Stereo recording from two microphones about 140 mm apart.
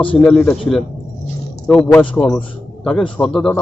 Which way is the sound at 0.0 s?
10° left (ahead or behind).